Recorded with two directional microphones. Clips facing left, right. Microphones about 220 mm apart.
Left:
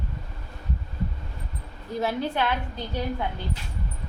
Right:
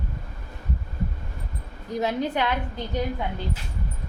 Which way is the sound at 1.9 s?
20° right (ahead or behind).